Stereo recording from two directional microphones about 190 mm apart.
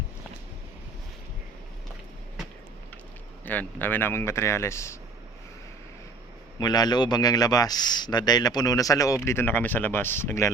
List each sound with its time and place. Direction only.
3.4 s speech: 10° left (ahead or behind)
6.6 s a man's voice: 20° left (ahead or behind)